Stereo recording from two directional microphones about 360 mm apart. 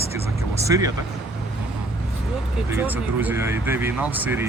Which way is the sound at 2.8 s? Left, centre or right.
Centre.